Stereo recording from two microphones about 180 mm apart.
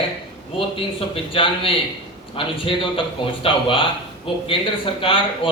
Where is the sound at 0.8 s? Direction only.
30° left (ahead or behind).